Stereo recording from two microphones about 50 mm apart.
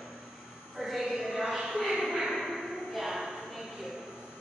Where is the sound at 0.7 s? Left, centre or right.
Centre.